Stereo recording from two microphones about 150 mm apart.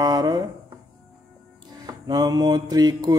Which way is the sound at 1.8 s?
25° right (ahead or behind).